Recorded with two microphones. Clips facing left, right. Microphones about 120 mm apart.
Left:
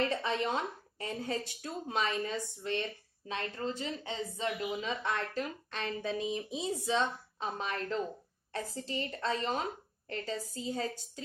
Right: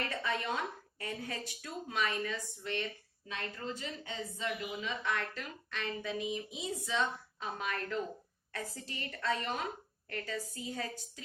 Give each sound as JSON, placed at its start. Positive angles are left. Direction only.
{"t": 0.0, "sound": "a woman's voice", "side_deg": 25}